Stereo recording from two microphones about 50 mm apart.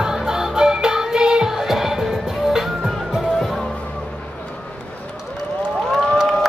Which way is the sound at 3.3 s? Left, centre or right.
Centre.